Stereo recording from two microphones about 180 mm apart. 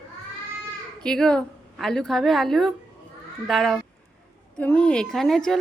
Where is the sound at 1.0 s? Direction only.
5° left (ahead or behind).